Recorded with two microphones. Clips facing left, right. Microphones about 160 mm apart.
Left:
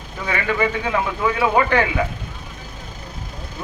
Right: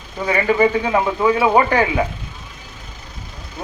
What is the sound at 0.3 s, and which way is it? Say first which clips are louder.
Speech: right 5 dB; 35° right (ahead or behind).